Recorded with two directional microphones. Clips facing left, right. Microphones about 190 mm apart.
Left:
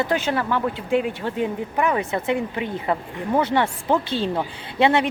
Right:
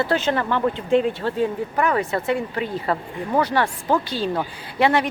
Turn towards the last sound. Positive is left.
turn(degrees=25)  # may be behind; listen again after turning